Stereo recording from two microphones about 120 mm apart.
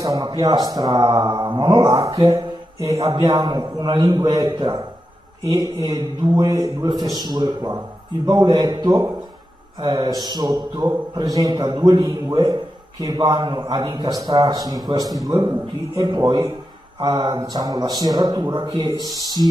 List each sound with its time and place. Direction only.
0.0 s a man's voice: 30° right (ahead or behind)
3.2 s a man's voice: 40° right (ahead or behind)
5.4 s a man's voice: 30° right (ahead or behind)
19.1 s speech: 30° left (ahead or behind)